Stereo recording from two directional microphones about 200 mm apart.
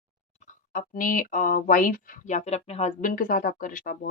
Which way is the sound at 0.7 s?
45° left (ahead or behind).